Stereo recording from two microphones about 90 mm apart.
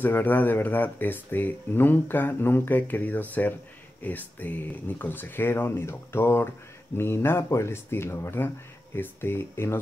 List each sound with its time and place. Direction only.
0.0 s speech: 20° left (ahead or behind)